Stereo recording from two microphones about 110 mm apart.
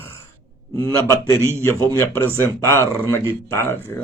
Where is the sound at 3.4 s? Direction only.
20° left (ahead or behind).